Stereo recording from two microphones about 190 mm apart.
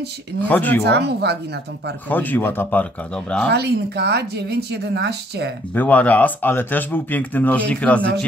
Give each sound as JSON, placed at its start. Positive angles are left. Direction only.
{"t": 0.5, "sound": "speech", "side_deg": 10}
{"t": 0.8, "sound": "speech", "side_deg": -60}
{"t": 2.0, "sound": "speech", "side_deg": 10}
{"t": 3.5, "sound": "speech", "side_deg": -60}
{"t": 5.8, "sound": "speech", "side_deg": 10}